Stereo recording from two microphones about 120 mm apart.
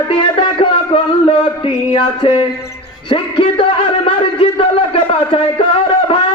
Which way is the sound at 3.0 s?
45° left (ahead or behind).